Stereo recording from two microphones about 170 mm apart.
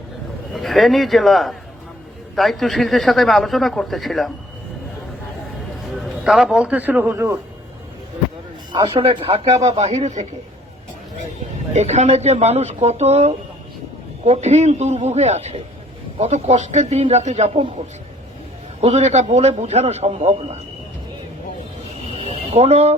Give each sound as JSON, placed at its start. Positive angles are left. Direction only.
{"t": 0.5, "sound": "speech", "side_deg": 0}
{"t": 6.2, "sound": "a man's voice", "side_deg": -5}
{"t": 8.7, "sound": "a man's voice", "side_deg": -25}
{"t": 11.7, "sound": "a man's voice", "side_deg": -40}
{"t": 18.8, "sound": "a man's voice", "side_deg": -40}
{"t": 22.2, "sound": "a sound", "side_deg": -35}